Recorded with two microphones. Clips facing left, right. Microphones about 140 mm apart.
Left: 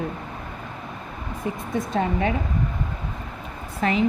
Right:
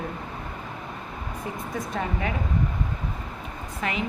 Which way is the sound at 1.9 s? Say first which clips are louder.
Left 6 dB; 30° left (ahead or behind).